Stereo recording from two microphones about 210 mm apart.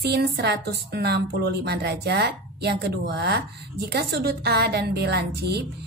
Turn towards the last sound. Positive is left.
turn(degrees=-50)  # may be behind; listen again after turning